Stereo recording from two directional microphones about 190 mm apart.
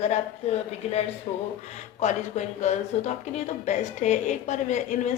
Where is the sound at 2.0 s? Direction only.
40° left (ahead or behind).